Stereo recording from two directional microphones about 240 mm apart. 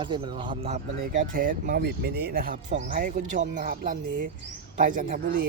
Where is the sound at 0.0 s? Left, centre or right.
Centre.